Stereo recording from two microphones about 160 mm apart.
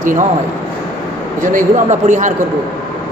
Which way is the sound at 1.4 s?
50° right (ahead or behind).